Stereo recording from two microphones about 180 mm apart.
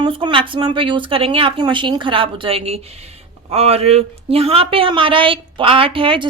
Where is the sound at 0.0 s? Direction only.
25° right (ahead or behind).